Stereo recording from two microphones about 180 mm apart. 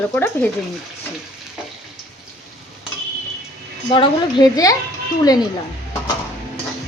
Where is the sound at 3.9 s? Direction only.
25° left (ahead or behind).